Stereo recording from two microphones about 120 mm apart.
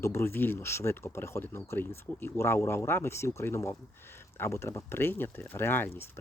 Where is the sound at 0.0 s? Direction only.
20° left (ahead or behind).